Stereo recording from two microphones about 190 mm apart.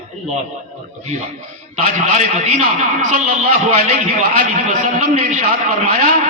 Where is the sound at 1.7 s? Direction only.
40° right (ahead or behind).